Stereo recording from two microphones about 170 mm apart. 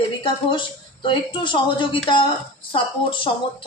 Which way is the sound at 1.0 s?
30° left (ahead or behind).